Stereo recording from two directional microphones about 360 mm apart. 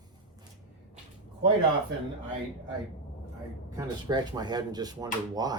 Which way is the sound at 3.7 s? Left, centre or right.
Centre.